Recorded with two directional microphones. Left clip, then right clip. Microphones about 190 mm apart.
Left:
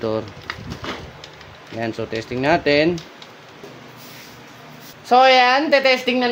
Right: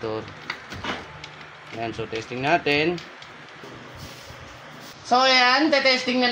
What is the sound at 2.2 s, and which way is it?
Speech, 40° left (ahead or behind).